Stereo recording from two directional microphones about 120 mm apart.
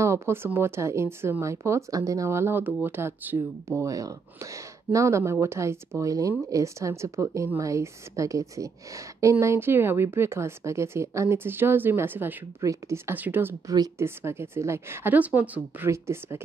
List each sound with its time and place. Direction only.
0.0 s a woman's voice: 20° right (ahead or behind)
15.9 s a woman's voice: 25° right (ahead or behind)